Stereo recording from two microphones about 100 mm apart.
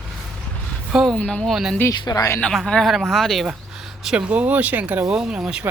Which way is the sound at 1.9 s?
35° left (ahead or behind).